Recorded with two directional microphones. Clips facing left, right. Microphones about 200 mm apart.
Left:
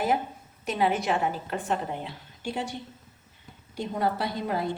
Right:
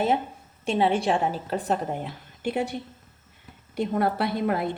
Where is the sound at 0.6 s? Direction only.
30° right (ahead or behind); by 2.7 s 60° right (ahead or behind).